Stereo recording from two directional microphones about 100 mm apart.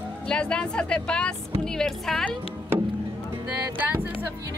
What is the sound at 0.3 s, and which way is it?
Speech, 10° left (ahead or behind).